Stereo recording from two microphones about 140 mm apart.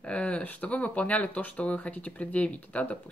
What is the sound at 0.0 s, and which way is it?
Speech, 10° left (ahead or behind).